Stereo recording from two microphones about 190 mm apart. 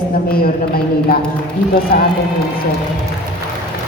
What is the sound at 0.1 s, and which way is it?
Speech, 50° left (ahead or behind).